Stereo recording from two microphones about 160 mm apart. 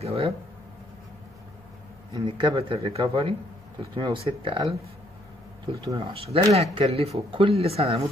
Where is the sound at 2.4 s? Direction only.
30° right (ahead or behind).